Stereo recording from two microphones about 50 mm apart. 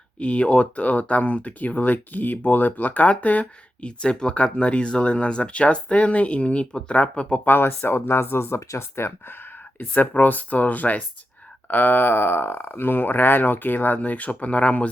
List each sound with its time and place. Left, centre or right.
0.2 s speech: left
7.4 s speech: left
9.9 s speech: left